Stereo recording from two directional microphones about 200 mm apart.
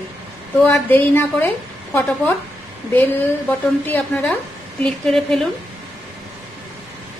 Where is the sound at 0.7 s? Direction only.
10° left (ahead or behind).